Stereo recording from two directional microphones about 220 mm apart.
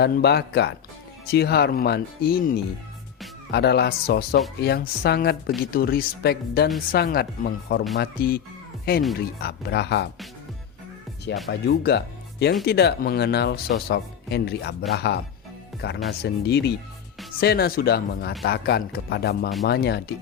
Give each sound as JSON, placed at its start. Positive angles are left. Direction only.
{"t": 0.0, "sound": "speech", "side_deg": 50}
{"t": 11.4, "sound": "speech", "side_deg": 45}